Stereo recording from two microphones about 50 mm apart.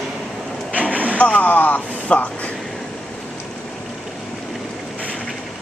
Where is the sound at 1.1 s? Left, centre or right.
Left.